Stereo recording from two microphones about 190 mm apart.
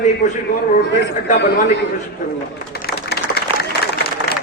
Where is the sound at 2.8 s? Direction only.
55° left (ahead or behind).